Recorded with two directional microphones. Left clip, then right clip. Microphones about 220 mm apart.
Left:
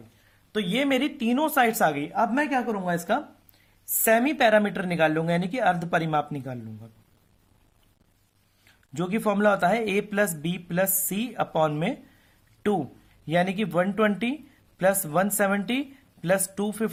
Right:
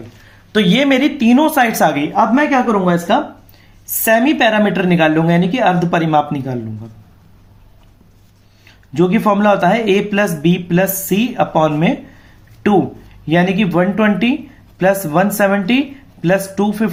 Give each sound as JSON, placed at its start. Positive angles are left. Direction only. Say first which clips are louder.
{"t": 0.5, "sound": "speech", "louder": "right 12 dB", "side_deg": 25}
{"t": 8.9, "sound": "speech", "louder": "right 13 dB", "side_deg": 50}
{"t": 13.2, "sound": "speech", "louder": "right 10 dB", "side_deg": 45}